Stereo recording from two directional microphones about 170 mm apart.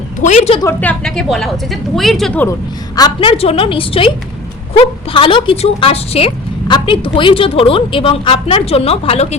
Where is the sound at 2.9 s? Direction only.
25° left (ahead or behind).